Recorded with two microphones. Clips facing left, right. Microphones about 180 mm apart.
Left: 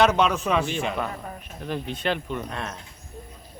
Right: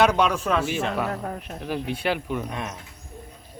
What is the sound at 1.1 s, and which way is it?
Speech, 65° right (ahead or behind).